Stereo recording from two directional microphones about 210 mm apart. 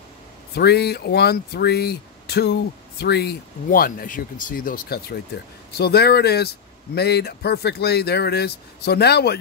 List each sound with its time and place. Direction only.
0.6 s speech: 50° left (ahead or behind)